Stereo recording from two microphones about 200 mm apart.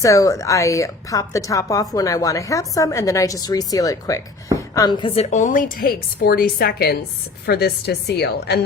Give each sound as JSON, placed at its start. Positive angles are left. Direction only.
{"t": 0.0, "sound": "a woman's voice", "side_deg": 15}